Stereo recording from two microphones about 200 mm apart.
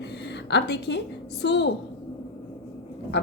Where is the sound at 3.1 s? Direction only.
55° left (ahead or behind).